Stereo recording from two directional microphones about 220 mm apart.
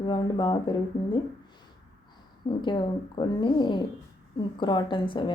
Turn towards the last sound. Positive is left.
turn(degrees=20)  # may be behind; listen again after turning